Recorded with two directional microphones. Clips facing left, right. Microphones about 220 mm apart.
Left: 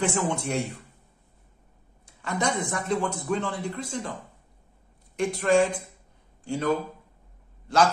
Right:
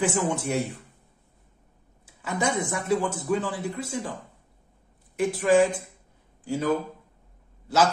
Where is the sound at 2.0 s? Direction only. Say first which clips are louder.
Right 1 dB; 5° right (ahead or behind).